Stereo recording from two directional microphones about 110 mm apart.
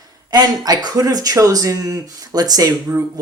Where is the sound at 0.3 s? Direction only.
35° right (ahead or behind).